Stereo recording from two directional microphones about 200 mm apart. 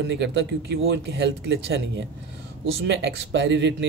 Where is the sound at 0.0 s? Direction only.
60° right (ahead or behind).